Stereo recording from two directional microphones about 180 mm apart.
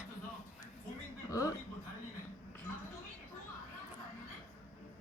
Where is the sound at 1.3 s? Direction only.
20° left (ahead or behind).